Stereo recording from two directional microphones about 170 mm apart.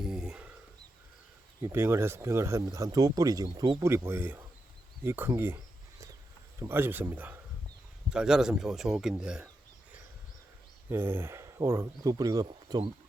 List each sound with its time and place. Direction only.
0.0 s a sound: 5° right (ahead or behind)
1.6 s speech: 15° right (ahead or behind)
6.6 s speech: 15° right (ahead or behind)
10.8 s speech: 15° right (ahead or behind)